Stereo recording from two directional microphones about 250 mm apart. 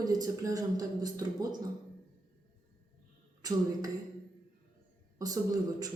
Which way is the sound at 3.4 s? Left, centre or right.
Centre.